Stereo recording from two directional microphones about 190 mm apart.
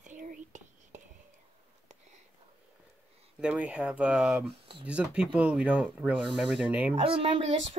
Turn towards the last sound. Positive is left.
turn(degrees=-30)  # may be behind; listen again after turning